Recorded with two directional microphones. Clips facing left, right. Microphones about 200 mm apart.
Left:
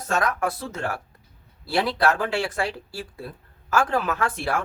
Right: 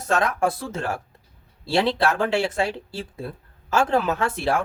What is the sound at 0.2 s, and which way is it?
Speech, 25° right (ahead or behind).